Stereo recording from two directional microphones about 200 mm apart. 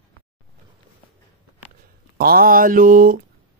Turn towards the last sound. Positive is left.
turn(degrees=-45)  # may be behind; listen again after turning